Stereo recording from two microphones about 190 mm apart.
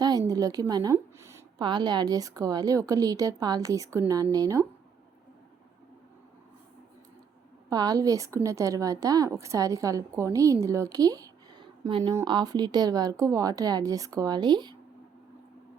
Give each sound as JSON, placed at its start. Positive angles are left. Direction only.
{"t": 0.0, "sound": "a woman's voice", "side_deg": -20}
{"t": 7.7, "sound": "a woman's voice", "side_deg": -20}